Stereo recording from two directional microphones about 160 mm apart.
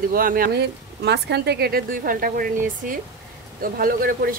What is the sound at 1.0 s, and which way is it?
Speech, 90° right.